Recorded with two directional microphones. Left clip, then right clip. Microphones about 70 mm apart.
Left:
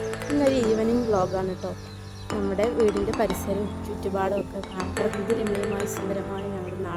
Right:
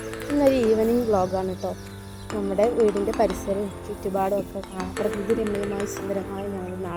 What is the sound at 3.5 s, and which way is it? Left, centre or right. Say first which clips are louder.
Speech: right 2 dB; right.